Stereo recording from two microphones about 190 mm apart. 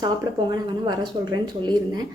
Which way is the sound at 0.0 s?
25° right (ahead or behind).